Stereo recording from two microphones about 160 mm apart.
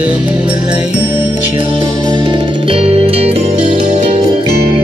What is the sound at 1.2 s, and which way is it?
Music, 50° left (ahead or behind).